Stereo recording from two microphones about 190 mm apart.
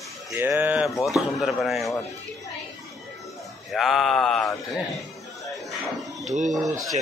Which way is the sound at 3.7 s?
Centre (ahead or behind).